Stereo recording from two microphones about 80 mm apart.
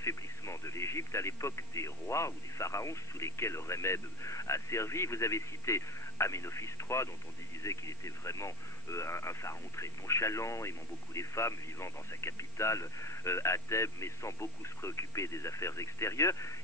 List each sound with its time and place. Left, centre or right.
0.0 s speech: left